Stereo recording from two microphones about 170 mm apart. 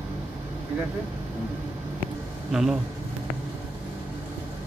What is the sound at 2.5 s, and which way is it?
Speech, centre (ahead or behind).